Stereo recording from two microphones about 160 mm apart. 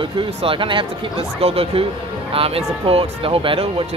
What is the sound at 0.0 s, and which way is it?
Speech, 35° right (ahead or behind).